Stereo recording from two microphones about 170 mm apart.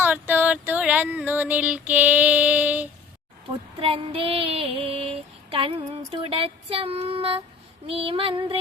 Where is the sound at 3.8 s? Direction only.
35° right (ahead or behind).